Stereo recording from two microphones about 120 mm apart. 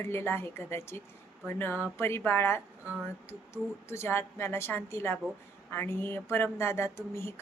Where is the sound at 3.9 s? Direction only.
20° left (ahead or behind).